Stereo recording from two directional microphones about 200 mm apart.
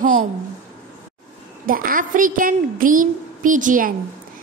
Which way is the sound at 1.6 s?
45° right (ahead or behind).